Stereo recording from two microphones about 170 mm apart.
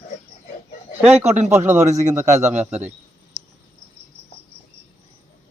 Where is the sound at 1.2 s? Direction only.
40° right (ahead or behind).